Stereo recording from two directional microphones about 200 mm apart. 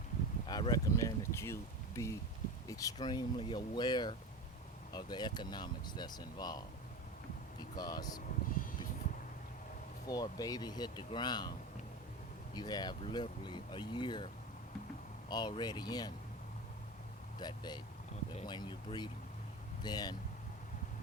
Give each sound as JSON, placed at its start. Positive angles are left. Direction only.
{"t": 0.4, "sound": "a sound", "side_deg": 20}
{"t": 2.0, "sound": "speech", "side_deg": 15}
{"t": 7.8, "sound": "speech", "side_deg": 20}
{"t": 10.1, "sound": "speech", "side_deg": 20}
{"t": 12.5, "sound": "speech", "side_deg": 20}
{"t": 15.3, "sound": "speech", "side_deg": 20}
{"t": 17.4, "sound": "speech", "side_deg": 20}